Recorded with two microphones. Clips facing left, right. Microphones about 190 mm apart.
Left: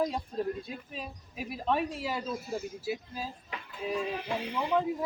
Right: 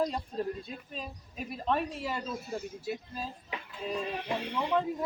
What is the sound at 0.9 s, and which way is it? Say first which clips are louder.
Speech: even; 5° left (ahead or behind).